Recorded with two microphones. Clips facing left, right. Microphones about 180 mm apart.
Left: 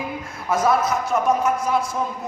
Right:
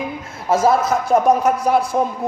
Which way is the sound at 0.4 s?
30° right (ahead or behind).